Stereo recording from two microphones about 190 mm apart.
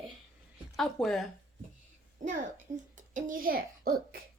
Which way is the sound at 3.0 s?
45° right (ahead or behind).